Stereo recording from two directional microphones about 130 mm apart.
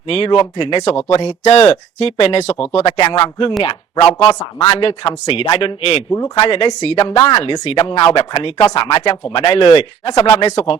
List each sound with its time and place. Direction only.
0.1 s speech: 45° left (ahead or behind)
1.0 s speech: 55° left (ahead or behind)
7.2 s speech: 35° left (ahead or behind)
8.6 s speech: 35° left (ahead or behind)
10.4 s speech: 55° left (ahead or behind)